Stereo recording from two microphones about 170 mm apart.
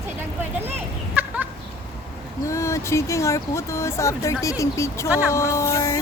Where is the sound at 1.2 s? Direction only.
10° right (ahead or behind).